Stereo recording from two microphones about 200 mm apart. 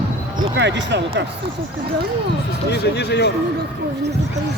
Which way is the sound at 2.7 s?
55° left (ahead or behind).